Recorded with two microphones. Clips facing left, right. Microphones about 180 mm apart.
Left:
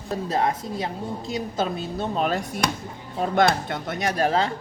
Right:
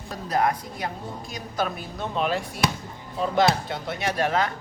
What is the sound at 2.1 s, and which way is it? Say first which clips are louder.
A woman's voice: right 1 dB; 45° left (ahead or behind).